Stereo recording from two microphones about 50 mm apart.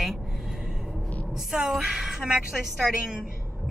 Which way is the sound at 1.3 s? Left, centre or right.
Centre.